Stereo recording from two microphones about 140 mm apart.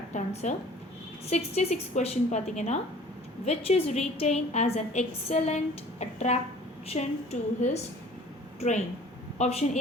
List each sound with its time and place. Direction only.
0.1 s a woman's voice: 60° left (ahead or behind)
1.3 s a woman's voice: 50° left (ahead or behind)
9.4 s a woman's voice: 50° left (ahead or behind)